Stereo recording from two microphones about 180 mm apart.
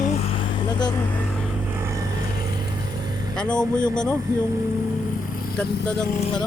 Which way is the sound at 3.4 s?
5° left (ahead or behind).